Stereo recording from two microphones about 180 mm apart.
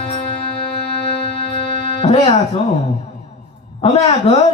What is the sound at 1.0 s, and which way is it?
Music, 30° left (ahead or behind).